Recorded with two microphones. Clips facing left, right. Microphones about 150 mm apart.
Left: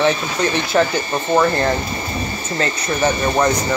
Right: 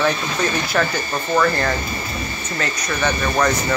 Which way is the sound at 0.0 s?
20° left (ahead or behind).